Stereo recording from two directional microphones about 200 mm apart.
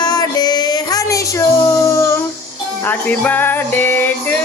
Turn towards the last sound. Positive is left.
turn(degrees=10)  # may be behind; listen again after turning